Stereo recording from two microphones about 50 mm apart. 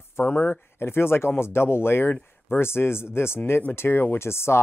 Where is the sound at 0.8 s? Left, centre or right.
Left.